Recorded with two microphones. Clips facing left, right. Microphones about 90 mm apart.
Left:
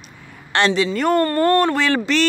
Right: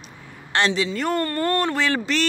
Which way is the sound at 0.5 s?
60° left (ahead or behind).